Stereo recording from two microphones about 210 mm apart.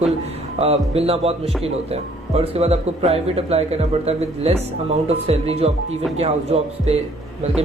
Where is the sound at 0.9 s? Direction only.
30° right (ahead or behind).